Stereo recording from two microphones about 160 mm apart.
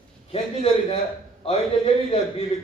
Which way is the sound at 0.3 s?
40° left (ahead or behind).